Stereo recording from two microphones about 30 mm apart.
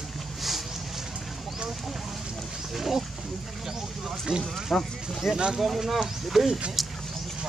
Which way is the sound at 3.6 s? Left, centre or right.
Centre.